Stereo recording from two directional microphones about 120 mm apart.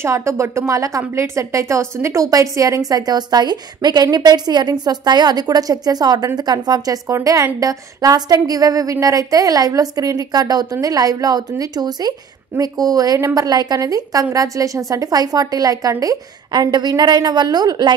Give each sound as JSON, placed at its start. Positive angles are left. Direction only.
{"t": 0.0, "sound": "a woman's voice", "side_deg": -25}